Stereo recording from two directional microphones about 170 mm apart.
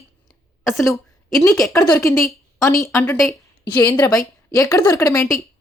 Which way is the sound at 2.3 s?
20° left (ahead or behind).